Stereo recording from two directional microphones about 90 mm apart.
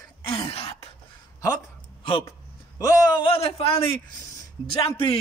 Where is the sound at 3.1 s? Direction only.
80° left.